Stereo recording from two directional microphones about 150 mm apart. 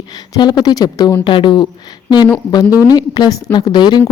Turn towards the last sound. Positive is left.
turn(degrees=30)  # may be behind; listen again after turning